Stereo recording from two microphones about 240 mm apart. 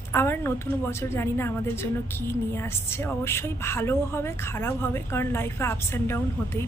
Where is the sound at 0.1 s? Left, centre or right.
Centre.